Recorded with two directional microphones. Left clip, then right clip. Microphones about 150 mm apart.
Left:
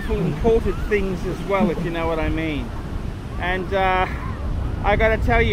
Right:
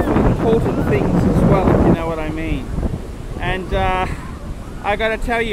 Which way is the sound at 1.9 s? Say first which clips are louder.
Right 1 dB; 5° right (ahead or behind).